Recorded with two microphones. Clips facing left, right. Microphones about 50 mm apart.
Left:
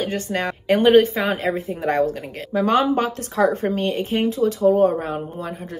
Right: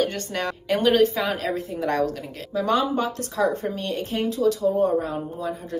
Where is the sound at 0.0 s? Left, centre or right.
Centre.